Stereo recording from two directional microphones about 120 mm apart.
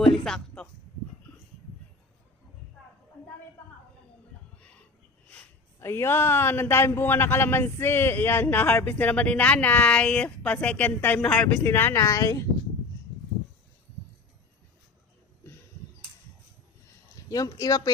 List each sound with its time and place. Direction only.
0.3 s a sound: 5° left (ahead or behind)
5.8 s a man's voice: 20° left (ahead or behind)
17.2 s speech: 30° left (ahead or behind)